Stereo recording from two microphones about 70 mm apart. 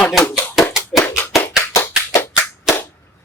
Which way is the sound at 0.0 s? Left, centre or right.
Centre.